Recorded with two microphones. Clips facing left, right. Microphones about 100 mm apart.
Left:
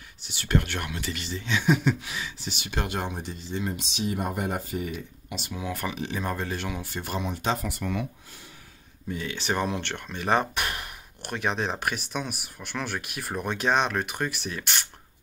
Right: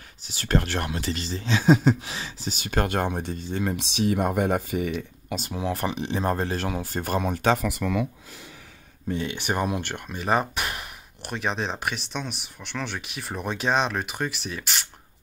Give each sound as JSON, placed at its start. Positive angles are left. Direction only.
{"t": 0.3, "sound": "speech", "side_deg": -35}
{"t": 5.3, "sound": "speech", "side_deg": -40}
{"t": 6.2, "sound": "speech", "side_deg": -40}
{"t": 7.5, "sound": "speech", "side_deg": -90}
{"t": 9.1, "sound": "speech", "side_deg": -25}
{"t": 9.4, "sound": "speech", "side_deg": -10}